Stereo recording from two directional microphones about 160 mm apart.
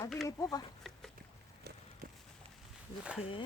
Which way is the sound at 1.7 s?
80° right.